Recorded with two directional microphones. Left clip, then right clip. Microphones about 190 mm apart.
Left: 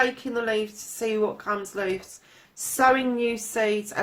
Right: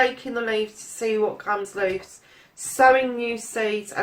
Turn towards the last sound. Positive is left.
turn(degrees=45)  # may be behind; listen again after turning